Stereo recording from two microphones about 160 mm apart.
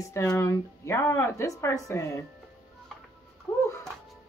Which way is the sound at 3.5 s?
15° left (ahead or behind).